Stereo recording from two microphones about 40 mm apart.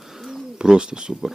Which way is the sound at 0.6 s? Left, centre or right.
Right.